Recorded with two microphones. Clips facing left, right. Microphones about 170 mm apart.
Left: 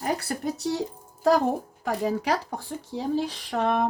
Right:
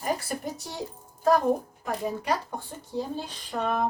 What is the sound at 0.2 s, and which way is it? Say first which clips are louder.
Speech: left 4 dB; 70° left (ahead or behind).